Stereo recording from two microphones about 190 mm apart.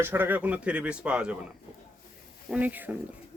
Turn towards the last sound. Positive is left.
turn(degrees=-10)  # may be behind; listen again after turning